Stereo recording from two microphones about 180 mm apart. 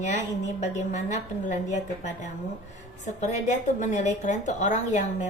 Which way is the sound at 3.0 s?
40° left (ahead or behind).